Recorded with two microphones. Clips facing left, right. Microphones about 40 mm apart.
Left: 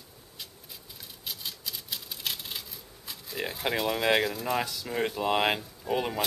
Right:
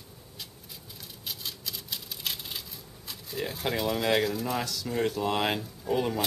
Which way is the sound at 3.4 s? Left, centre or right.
Centre.